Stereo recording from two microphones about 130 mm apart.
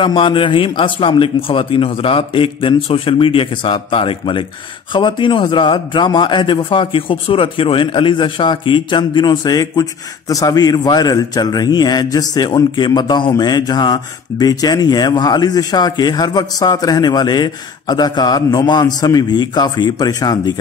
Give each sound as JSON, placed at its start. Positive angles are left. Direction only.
{"t": 0.0, "sound": "a man's voice", "side_deg": 40}